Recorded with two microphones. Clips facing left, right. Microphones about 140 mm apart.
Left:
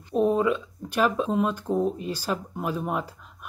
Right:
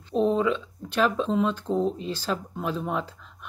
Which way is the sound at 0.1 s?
10° left (ahead or behind).